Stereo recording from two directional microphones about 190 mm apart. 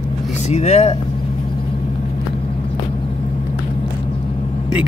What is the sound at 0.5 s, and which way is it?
Speech, 35° left (ahead or behind).